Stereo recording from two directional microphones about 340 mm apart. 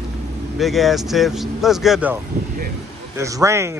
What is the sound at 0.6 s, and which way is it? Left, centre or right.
Speech, centre.